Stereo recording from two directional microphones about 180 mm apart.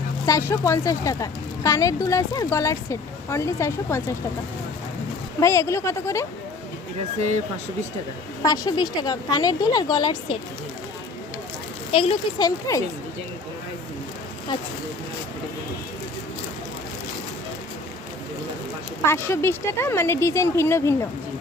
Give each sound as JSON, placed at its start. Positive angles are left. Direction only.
{"t": 0.3, "sound": "speech", "side_deg": 15}
{"t": 5.4, "sound": "speech", "side_deg": 15}
{"t": 8.4, "sound": "a woman's voice", "side_deg": 20}
{"t": 11.9, "sound": "a child's voice", "side_deg": 30}
{"t": 12.5, "sound": "a woman's voice", "side_deg": 20}
{"t": 19.0, "sound": "speech", "side_deg": 15}